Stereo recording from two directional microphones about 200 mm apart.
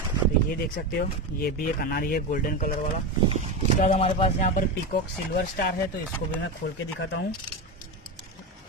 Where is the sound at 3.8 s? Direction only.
30° left (ahead or behind).